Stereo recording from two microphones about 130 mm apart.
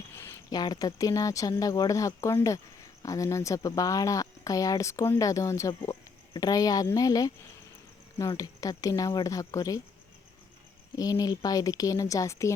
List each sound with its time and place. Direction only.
0.5 s speech: 30° left (ahead or behind)
8.4 s speech: 25° left (ahead or behind)
10.9 s speech: 30° left (ahead or behind)